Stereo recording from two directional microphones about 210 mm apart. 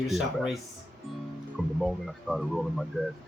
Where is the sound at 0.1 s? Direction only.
Centre (ahead or behind).